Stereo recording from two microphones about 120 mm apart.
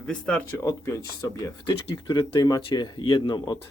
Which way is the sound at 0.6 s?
25° left (ahead or behind).